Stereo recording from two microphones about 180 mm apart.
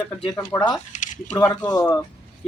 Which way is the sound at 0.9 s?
45° left (ahead or behind).